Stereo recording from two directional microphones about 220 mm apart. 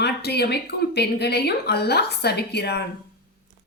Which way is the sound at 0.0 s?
50° left (ahead or behind).